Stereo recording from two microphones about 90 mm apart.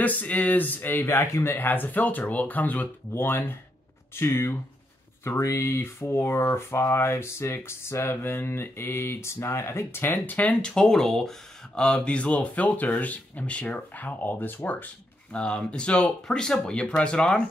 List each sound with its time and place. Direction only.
0.0 s speech: 15° left (ahead or behind)